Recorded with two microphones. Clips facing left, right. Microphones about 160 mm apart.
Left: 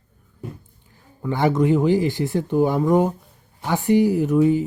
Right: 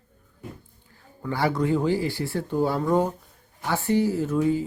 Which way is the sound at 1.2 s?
20° left (ahead or behind).